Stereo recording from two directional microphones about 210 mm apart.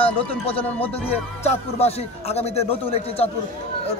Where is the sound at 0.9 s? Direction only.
30° left (ahead or behind).